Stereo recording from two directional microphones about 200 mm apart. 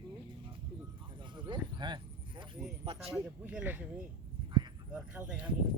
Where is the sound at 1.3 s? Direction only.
25° right (ahead or behind).